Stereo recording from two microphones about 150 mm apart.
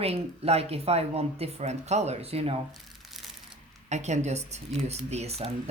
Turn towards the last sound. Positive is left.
turn(degrees=-45)  # may be behind; listen again after turning